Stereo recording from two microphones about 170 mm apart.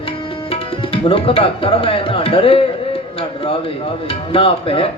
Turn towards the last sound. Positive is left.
turn(degrees=35)  # may be behind; listen again after turning